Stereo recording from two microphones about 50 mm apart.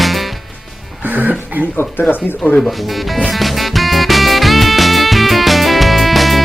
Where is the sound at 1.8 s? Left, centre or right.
Left.